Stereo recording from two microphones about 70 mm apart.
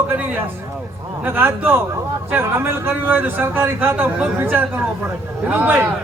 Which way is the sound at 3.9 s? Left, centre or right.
Right.